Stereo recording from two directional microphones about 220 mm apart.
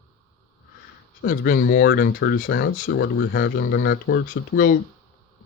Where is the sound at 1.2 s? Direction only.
40° left (ahead or behind).